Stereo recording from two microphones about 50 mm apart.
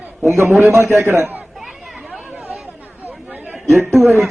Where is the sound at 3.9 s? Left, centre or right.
Centre.